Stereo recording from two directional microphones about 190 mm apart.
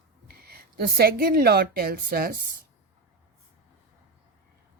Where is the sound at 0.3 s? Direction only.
55° right (ahead or behind).